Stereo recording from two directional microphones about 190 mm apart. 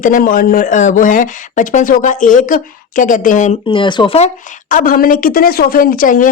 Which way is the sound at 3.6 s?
25° left (ahead or behind).